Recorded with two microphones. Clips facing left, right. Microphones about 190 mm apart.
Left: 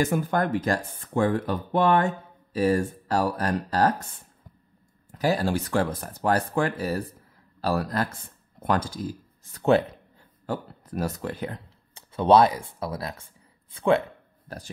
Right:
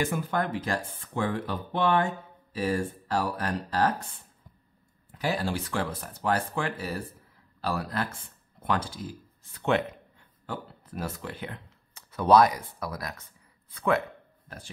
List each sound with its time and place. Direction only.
0.0 s speech: 45° left (ahead or behind)
5.1 s speech: 40° left (ahead or behind)